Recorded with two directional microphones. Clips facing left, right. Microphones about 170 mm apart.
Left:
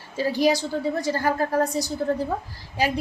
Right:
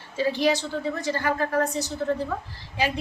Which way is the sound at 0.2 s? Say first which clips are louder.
Left 2 dB; 40° left (ahead or behind).